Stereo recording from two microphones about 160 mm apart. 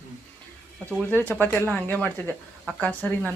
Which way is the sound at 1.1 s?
10° left (ahead or behind).